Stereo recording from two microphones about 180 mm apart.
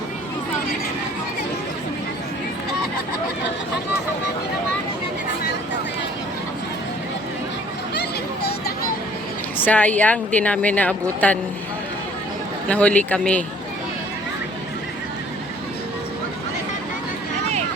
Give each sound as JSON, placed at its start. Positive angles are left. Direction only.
{"t": 7.9, "sound": "a sound", "side_deg": 65}
{"t": 9.6, "sound": "speech", "side_deg": 10}
{"t": 12.6, "sound": "speech", "side_deg": 5}